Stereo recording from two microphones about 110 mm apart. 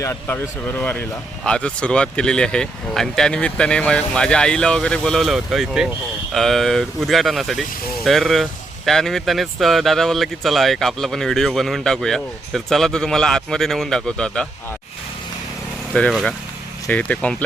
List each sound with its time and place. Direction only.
0.0 s speech: 20° left (ahead or behind)
15.9 s speech: 5° left (ahead or behind)